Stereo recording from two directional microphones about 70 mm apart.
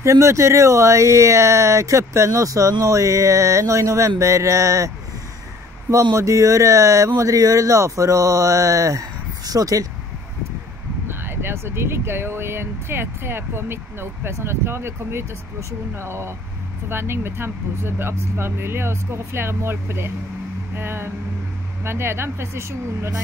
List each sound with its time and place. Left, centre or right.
0.0 s speech: right
11.1 s speech: right